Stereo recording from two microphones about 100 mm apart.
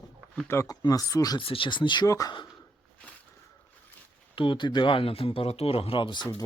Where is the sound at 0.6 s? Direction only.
35° left (ahead or behind).